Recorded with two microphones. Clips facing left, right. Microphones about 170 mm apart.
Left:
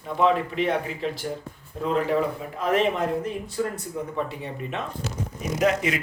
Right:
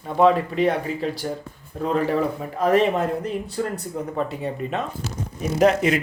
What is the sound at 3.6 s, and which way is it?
Speech, 50° right (ahead or behind).